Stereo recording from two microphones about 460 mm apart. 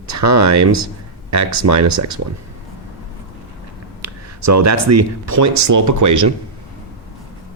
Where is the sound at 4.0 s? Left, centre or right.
Right.